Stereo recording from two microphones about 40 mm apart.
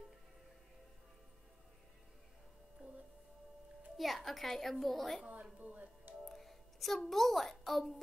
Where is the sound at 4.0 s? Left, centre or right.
Centre.